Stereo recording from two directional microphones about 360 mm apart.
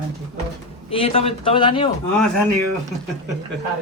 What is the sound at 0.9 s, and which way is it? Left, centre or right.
Speech, centre.